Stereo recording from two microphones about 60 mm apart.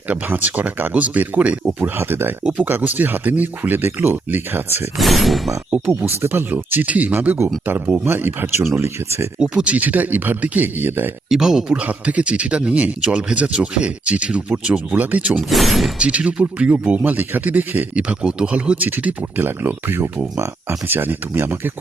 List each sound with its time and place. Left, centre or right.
0.1 s speech: right
2.0 s speech: right
2.4 s speech: centre
2.6 s speech: right
4.9 s speech: centre
5.8 s speech: right
6.5 s speech: right
9.4 s speech: centre
11.3 s speech: centre
11.7 s speech: right
15.4 s speech: centre
16.0 s speech: right
18.8 s speech: right